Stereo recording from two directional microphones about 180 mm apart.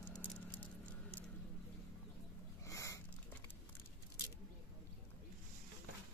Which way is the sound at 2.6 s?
15° left (ahead or behind).